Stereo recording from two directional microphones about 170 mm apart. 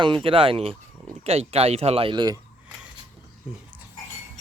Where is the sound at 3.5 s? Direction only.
5° right (ahead or behind).